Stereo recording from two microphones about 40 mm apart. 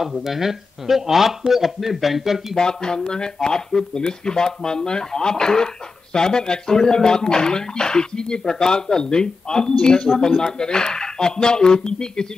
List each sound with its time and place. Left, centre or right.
0.0 s speech: centre
2.5 s speech: centre